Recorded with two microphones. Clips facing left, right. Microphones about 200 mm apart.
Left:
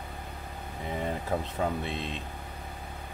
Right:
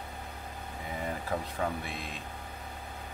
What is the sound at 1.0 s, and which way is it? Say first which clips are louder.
Speech: left 2 dB; 25° left (ahead or behind).